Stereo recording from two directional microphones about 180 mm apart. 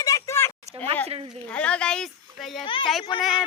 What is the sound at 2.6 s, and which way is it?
Speech, 30° left (ahead or behind).